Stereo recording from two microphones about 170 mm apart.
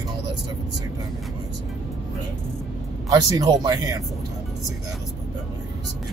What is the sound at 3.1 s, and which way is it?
Speech, 20° right (ahead or behind).